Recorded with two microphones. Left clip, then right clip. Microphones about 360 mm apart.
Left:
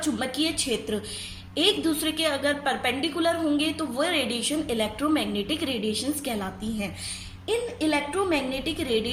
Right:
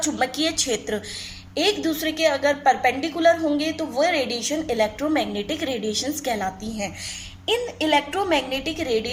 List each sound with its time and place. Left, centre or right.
0.0 s a woman's voice: centre
7.4 s a woman's voice: centre